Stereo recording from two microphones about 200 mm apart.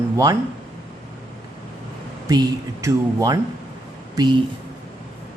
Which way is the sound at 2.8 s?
15° right (ahead or behind).